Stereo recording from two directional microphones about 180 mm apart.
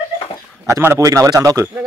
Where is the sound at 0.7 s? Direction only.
15° right (ahead or behind).